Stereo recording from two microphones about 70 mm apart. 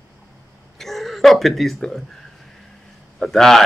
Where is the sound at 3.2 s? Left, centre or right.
Centre.